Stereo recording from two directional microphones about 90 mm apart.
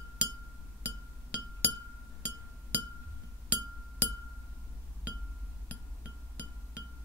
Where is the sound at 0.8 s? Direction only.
15° left (ahead or behind).